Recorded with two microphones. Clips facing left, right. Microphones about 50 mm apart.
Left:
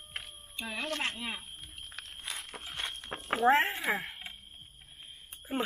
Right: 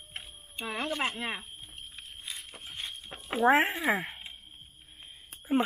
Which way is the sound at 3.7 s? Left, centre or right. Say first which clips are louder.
Right 4 dB; centre.